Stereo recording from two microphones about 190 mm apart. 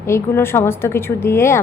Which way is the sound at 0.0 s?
15° left (ahead or behind).